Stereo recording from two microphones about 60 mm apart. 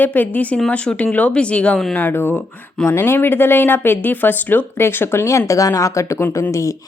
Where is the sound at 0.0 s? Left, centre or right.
Left.